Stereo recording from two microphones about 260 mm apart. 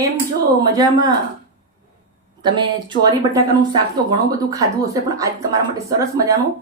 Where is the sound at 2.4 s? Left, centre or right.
Centre.